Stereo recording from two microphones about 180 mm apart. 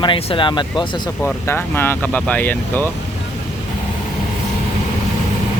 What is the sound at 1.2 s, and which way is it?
Speech, 10° left (ahead or behind).